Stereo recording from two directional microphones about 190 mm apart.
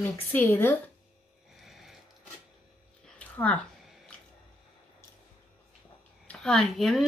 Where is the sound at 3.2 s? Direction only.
5° left (ahead or behind).